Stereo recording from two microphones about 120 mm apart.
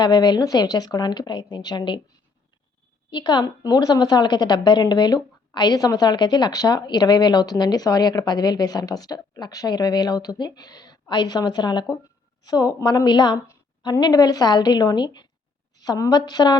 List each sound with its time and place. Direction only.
0.0 s a woman's voice: 35° left (ahead or behind)
3.1 s a woman's voice: 40° left (ahead or behind)